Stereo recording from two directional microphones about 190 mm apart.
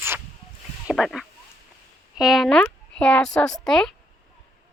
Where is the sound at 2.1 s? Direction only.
Centre (ahead or behind).